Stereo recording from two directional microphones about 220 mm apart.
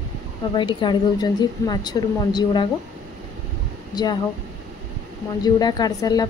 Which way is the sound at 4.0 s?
15° left (ahead or behind).